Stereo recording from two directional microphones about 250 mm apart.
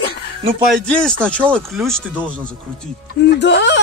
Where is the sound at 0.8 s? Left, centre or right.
Centre.